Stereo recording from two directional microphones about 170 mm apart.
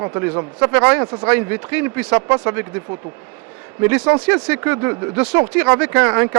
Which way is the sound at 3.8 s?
10° right (ahead or behind).